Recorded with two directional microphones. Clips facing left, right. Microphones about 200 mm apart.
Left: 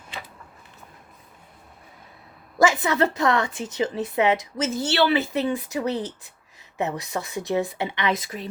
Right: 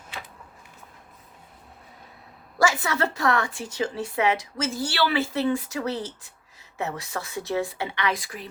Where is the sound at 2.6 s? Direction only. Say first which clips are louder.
Left 4 dB; 20° left (ahead or behind).